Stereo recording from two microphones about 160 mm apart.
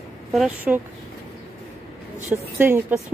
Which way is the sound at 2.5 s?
10° right (ahead or behind).